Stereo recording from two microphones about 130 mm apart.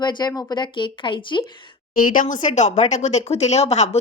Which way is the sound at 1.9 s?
90° left.